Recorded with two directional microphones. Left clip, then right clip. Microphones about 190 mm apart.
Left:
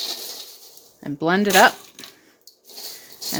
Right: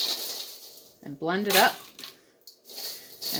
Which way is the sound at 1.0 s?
60° left (ahead or behind).